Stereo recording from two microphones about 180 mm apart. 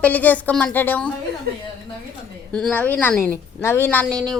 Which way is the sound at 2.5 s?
5° left (ahead or behind).